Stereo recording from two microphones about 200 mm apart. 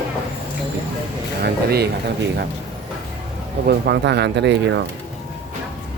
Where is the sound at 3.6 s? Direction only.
55° right (ahead or behind).